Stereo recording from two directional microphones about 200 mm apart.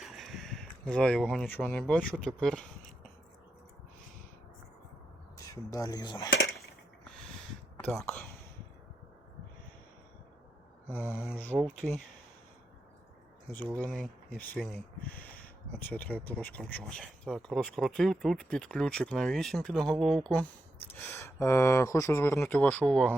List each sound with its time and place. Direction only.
0.0 s a sound: centre (ahead or behind)
2.2 s speech: 5° left (ahead or behind)
5.4 s speech: 15° left (ahead or behind)
7.9 s speech: 5° left (ahead or behind)
10.8 s mantra: 10° right (ahead or behind)
13.7 s speech: 5° left (ahead or behind)
15.8 s speech: 10° left (ahead or behind)